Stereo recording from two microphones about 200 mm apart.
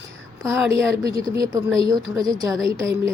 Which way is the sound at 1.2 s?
20° right (ahead or behind).